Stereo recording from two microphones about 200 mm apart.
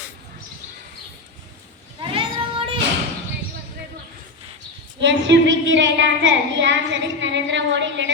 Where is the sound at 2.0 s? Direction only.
25° right (ahead or behind).